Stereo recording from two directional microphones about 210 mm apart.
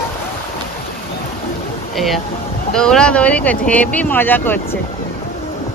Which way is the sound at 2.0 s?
Centre (ahead or behind).